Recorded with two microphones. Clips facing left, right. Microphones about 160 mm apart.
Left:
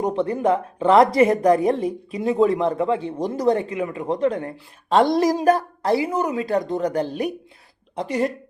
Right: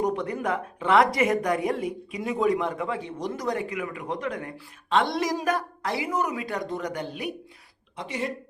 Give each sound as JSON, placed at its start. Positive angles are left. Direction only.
{"t": 0.0, "sound": "speech", "side_deg": 30}